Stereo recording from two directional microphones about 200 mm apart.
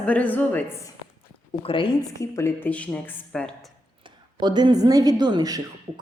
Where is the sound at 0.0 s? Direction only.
5° left (ahead or behind).